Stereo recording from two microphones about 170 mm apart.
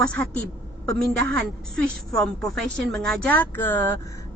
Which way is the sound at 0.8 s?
5° left (ahead or behind).